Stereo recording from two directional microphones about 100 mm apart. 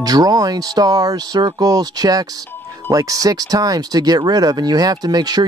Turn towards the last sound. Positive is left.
turn(degrees=-40)  # may be behind; listen again after turning